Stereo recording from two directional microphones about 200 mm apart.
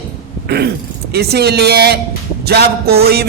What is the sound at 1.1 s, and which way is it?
A man's voice, 55° right (ahead or behind).